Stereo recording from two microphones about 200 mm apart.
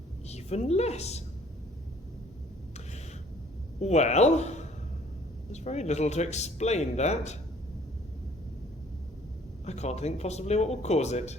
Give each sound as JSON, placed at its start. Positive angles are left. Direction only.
{"t": 0.3, "sound": "a woman's voice", "side_deg": 30}
{"t": 3.8, "sound": "speech", "side_deg": 35}
{"t": 9.6, "sound": "speech", "side_deg": 35}